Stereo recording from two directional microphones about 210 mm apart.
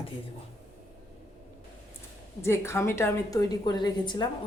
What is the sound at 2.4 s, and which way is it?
A woman's voice, 10° left (ahead or behind).